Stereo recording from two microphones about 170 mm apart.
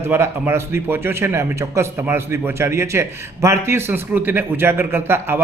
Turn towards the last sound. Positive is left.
turn(degrees=-15)  # may be behind; listen again after turning